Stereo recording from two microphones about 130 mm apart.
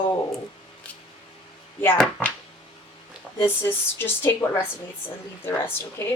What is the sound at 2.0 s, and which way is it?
Speech, 10° left (ahead or behind).